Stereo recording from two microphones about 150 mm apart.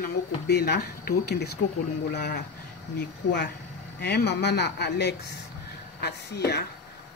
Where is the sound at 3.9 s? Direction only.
90° left.